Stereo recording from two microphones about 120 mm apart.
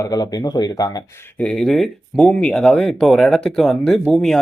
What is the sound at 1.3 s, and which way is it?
Speech, 5° left (ahead or behind).